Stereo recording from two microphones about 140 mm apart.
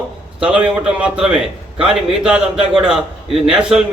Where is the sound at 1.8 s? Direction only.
5° right (ahead or behind).